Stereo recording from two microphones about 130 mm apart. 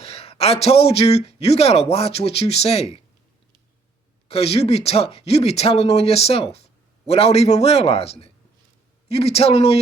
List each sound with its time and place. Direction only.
0.0 s speech: 50° left (ahead or behind)
4.3 s speech: 50° left (ahead or behind)